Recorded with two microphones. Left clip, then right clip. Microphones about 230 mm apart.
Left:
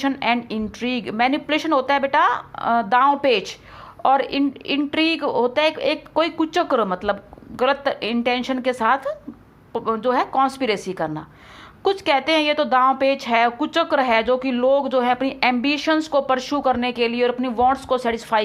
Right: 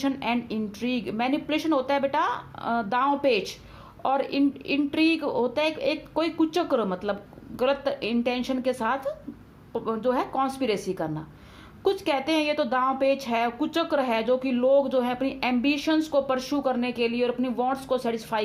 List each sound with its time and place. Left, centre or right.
0.0 s speech: centre